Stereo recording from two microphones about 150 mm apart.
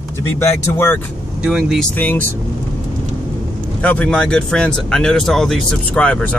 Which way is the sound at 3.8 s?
10° left (ahead or behind).